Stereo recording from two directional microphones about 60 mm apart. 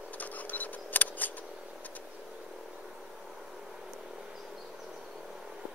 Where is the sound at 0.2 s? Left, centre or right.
Left.